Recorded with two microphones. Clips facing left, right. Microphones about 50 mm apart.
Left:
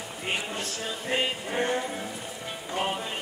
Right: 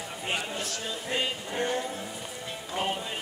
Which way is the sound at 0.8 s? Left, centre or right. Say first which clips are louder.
Left 3 dB; centre.